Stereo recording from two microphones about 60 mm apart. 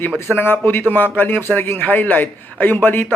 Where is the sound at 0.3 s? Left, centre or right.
Left.